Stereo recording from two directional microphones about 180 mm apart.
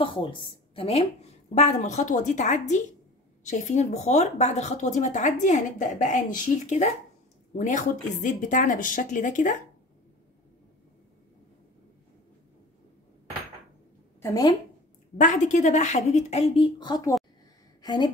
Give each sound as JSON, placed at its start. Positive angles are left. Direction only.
{"t": 0.0, "sound": "a woman's voice", "side_deg": 30}
{"t": 8.2, "sound": "a woman's voice", "side_deg": 45}
{"t": 14.2, "sound": "a woman's voice", "side_deg": 20}
{"t": 15.1, "sound": "a woman's voice", "side_deg": 45}